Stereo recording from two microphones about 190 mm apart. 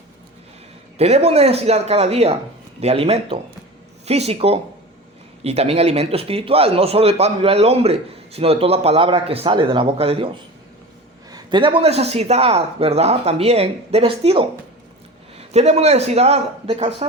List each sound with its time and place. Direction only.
0.9 s speech: 35° right (ahead or behind)
11.3 s speech: 20° right (ahead or behind)